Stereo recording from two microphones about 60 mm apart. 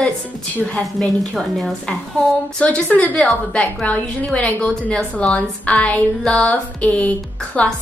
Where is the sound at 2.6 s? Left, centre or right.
Left.